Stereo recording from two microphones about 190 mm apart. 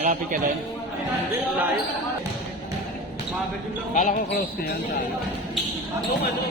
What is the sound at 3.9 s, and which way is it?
Speech, 45° left (ahead or behind).